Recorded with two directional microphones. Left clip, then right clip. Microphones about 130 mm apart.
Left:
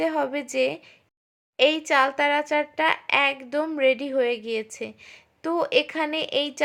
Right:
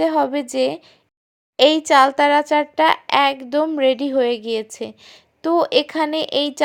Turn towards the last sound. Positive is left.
turn(degrees=-40)  # may be behind; listen again after turning